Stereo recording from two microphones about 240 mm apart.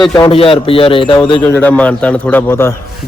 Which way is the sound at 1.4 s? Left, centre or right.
Centre.